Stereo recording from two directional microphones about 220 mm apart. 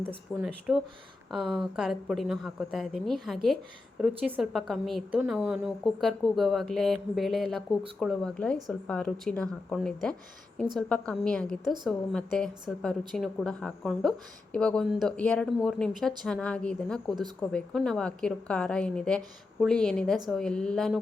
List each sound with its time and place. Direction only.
0.3 s speech: centre (ahead or behind)